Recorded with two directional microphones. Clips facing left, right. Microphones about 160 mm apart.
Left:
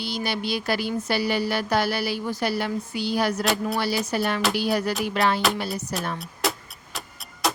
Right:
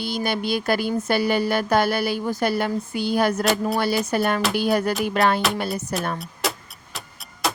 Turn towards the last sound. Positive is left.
turn(degrees=0)  # may be behind; listen again after turning